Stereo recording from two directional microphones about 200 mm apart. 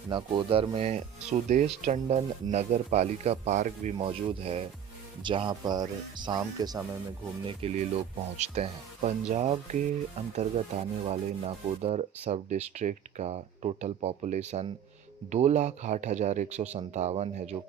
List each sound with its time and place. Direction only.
0.1 s speech: 25° right (ahead or behind)
3.9 s speech: 25° right (ahead or behind)
7.4 s speech: 30° right (ahead or behind)